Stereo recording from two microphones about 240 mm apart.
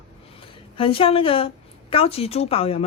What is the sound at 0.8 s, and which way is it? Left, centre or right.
A woman's voice, left.